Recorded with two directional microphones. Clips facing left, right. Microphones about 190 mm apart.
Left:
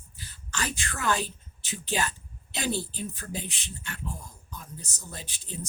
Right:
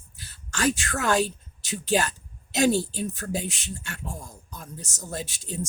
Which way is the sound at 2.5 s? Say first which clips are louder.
Right 9 dB; 85° right.